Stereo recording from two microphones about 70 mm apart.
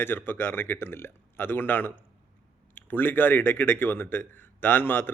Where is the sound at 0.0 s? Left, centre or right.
Left.